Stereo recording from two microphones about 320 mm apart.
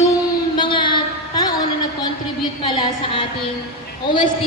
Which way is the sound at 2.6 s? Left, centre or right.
Centre.